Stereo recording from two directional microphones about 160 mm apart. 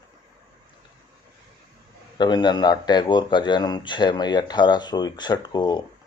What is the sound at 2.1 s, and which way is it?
A man's voice, 25° left (ahead or behind).